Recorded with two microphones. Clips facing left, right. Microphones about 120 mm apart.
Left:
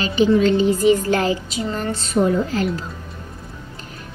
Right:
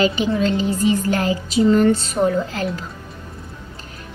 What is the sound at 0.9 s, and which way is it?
A woman's voice, 35° left (ahead or behind).